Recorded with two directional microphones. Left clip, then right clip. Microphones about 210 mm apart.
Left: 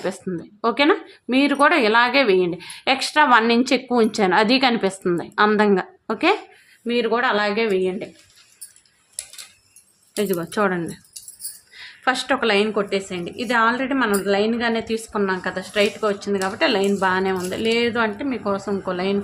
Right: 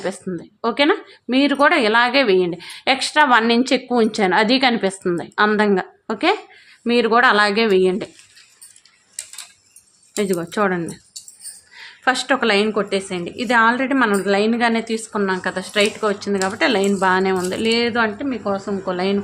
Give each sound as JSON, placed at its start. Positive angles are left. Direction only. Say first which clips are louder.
{"t": 0.0, "sound": "speech", "louder": "right 1 dB", "side_deg": 0}
{"t": 6.8, "sound": "speech", "louder": "right 6 dB", "side_deg": -30}
{"t": 10.2, "sound": "a woman's voice", "louder": "right 2 dB", "side_deg": -10}